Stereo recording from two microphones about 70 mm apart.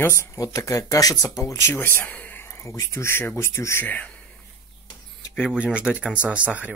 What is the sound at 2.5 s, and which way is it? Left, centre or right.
Speech, left.